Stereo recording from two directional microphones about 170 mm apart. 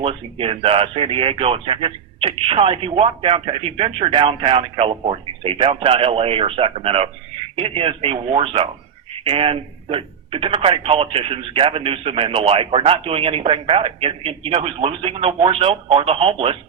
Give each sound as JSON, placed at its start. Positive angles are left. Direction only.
{"t": 0.0, "sound": "speech", "side_deg": -35}